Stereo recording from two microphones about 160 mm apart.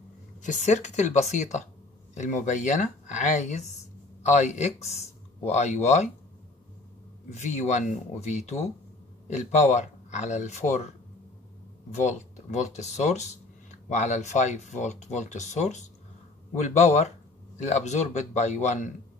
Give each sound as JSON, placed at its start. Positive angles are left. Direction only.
{"t": 0.4, "sound": "speech", "side_deg": 50}
{"t": 7.2, "sound": "speech", "side_deg": 45}
{"t": 11.9, "sound": "speech", "side_deg": 50}